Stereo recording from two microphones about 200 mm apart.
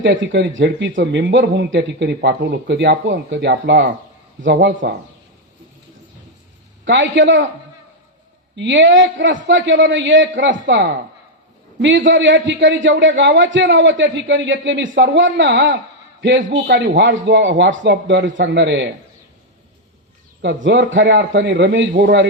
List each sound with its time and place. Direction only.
0.0 s speech: 70° right (ahead or behind)
6.8 s speech: 65° right (ahead or behind)
8.5 s a man's voice: 65° right (ahead or behind)
20.7 s a man's voice: 65° right (ahead or behind)